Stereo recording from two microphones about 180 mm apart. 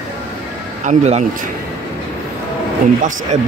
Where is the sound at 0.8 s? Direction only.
35° right (ahead or behind).